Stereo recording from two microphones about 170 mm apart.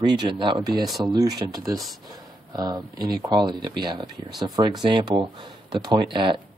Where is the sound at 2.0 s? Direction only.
20° right (ahead or behind).